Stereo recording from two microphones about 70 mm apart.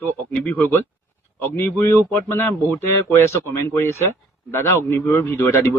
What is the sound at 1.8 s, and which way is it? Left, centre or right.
A man's voice, left.